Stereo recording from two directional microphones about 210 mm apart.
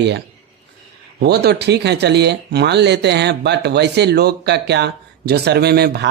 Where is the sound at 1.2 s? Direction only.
50° right (ahead or behind).